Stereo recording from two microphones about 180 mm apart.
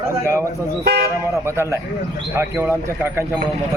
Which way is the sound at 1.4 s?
15° right (ahead or behind).